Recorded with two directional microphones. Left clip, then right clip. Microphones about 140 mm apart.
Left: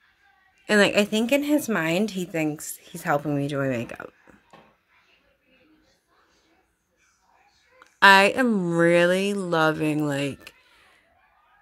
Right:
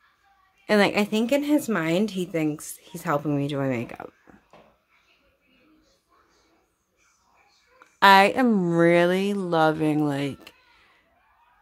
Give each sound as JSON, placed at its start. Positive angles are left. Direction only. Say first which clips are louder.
{"t": 0.7, "sound": "a woman's voice", "louder": "left 1 dB", "side_deg": -5}
{"t": 7.8, "sound": "speech", "louder": "even", "side_deg": -10}